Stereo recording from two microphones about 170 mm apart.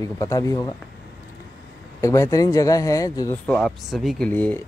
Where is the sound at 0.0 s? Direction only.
20° left (ahead or behind).